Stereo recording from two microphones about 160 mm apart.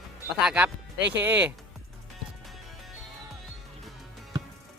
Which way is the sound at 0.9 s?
90° right.